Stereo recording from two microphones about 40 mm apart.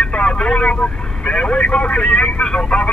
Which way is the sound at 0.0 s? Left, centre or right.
Left.